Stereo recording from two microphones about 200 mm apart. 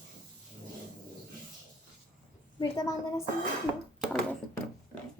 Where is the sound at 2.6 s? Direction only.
15° left (ahead or behind).